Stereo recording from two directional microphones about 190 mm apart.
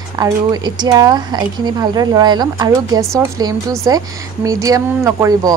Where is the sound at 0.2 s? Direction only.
20° right (ahead or behind).